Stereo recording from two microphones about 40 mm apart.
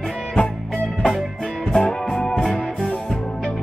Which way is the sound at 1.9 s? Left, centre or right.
Centre.